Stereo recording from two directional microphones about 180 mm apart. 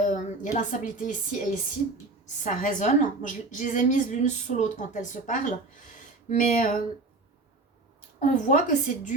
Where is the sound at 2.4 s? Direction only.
45° left (ahead or behind).